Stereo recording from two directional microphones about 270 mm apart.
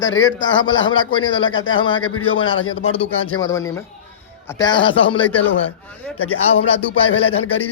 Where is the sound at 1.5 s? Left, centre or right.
Left.